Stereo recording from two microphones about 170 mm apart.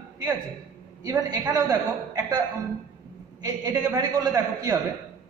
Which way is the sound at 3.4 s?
25° right (ahead or behind).